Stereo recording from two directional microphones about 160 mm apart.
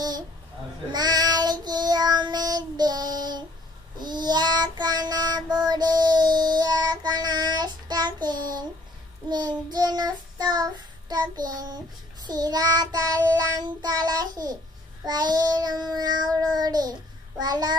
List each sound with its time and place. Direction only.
0.9 s child singing: 25° right (ahead or behind)